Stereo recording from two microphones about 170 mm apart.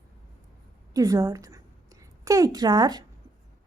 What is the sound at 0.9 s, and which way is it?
A woman's voice, 20° right (ahead or behind).